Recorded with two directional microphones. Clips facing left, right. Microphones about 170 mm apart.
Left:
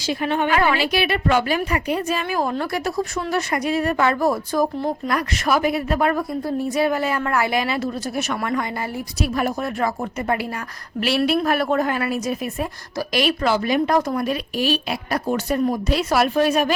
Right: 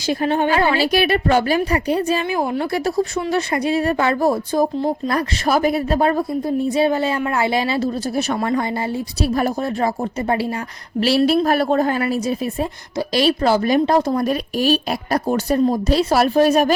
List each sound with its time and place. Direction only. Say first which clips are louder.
0.1 s a woman's voice: right 3 dB; 35° right (ahead or behind)
0.9 s a woman's voice: right 3 dB; 40° right (ahead or behind); by 2.6 s 20° right (ahead or behind)
2.7 s a woman's voice: right 4 dB; 30° right (ahead or behind)
14.3 s a woman's voice: right 4 dB; 40° right (ahead or behind)